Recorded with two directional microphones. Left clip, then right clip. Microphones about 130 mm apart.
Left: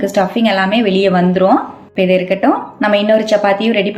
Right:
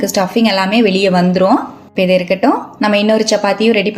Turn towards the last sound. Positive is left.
turn(degrees=-40)  # may be behind; listen again after turning